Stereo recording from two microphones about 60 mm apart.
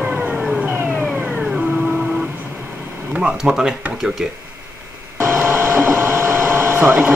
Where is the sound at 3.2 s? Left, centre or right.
Centre.